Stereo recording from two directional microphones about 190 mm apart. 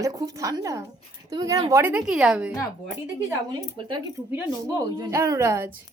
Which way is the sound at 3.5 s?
20° right (ahead or behind).